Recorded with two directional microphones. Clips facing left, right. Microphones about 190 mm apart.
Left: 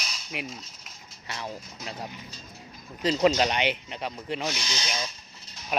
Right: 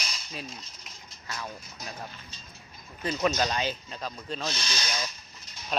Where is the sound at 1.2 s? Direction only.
25° left (ahead or behind).